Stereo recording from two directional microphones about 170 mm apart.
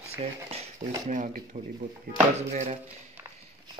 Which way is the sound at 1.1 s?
50° right (ahead or behind).